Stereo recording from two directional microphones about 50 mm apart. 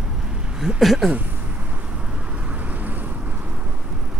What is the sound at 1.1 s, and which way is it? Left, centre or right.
Vehicle, right.